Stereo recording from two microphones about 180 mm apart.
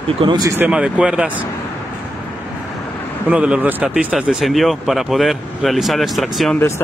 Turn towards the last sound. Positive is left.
turn(degrees=0)  # may be behind; listen again after turning